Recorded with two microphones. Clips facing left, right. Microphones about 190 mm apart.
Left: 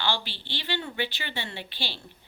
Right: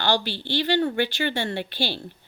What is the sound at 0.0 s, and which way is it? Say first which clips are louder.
Speech: right 7 dB; 45° right (ahead or behind).